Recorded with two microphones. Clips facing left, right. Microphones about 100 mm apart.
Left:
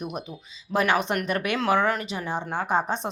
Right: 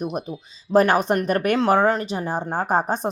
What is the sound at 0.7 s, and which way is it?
A woman's voice, 40° right (ahead or behind).